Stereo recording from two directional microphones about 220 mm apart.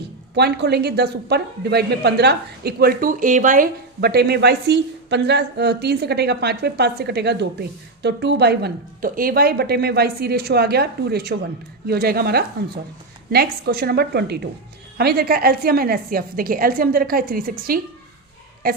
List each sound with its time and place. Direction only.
0.3 s a woman's voice: 50° right (ahead or behind)